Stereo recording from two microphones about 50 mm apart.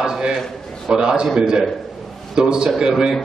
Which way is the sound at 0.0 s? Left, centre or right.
Centre.